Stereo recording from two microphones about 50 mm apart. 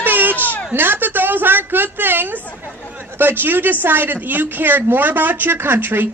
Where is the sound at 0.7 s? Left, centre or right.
Right.